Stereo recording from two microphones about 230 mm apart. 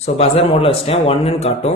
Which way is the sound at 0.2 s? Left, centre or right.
Left.